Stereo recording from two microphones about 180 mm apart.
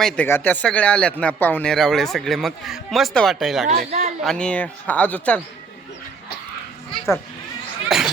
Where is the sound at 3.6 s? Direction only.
50° right (ahead or behind).